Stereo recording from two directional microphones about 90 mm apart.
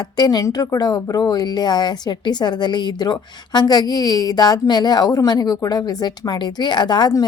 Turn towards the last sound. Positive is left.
turn(degrees=55)  # may be behind; listen again after turning